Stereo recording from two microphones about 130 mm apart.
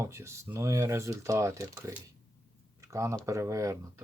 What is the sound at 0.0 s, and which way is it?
Speech, 20° right (ahead or behind).